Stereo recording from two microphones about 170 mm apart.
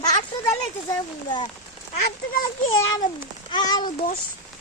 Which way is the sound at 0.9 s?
25° left (ahead or behind).